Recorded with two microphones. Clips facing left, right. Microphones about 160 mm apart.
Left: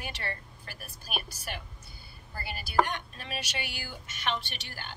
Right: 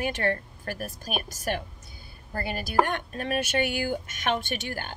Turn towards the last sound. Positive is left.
turn(degrees=-50)  # may be behind; listen again after turning